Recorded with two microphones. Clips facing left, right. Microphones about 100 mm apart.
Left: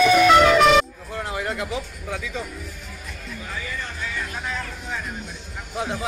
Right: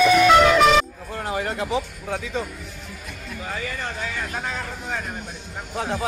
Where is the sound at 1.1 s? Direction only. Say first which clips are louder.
Right 1 dB; 40° right (ahead or behind).